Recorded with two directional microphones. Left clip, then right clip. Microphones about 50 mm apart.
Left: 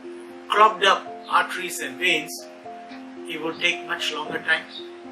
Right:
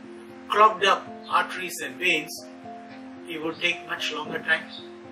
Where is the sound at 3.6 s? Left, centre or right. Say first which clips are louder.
Left 3 dB; centre.